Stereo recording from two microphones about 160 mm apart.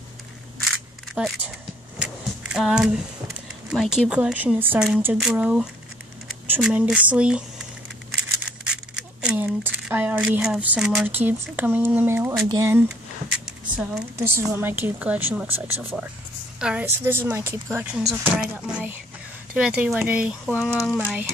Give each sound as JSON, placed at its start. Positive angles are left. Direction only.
{"t": 0.7, "sound": "single-lens reflex camera", "side_deg": 0}
{"t": 2.5, "sound": "speech", "side_deg": -5}
{"t": 8.6, "sound": "a sound", "side_deg": -5}
{"t": 11.4, "sound": "speech", "side_deg": -10}
{"t": 13.5, "sound": "a sound", "side_deg": 0}
{"t": 14.1, "sound": "speech", "side_deg": -15}
{"t": 20.7, "sound": "speech", "side_deg": 5}